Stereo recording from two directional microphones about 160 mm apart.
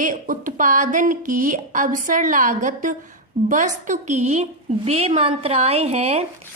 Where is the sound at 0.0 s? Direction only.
55° right (ahead or behind).